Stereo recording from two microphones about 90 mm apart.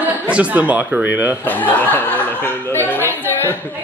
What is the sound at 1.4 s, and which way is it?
Speech, 20° left (ahead or behind).